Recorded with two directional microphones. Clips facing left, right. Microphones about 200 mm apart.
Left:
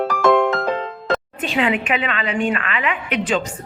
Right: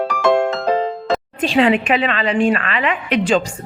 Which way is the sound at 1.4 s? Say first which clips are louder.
Right 8 dB; 30° right (ahead or behind).